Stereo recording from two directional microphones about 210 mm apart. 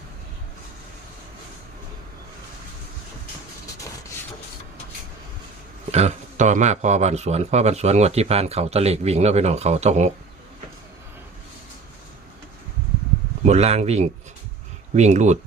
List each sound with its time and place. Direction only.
5.9 s a man's voice: 30° right (ahead or behind)
13.4 s a man's voice: 30° right (ahead or behind)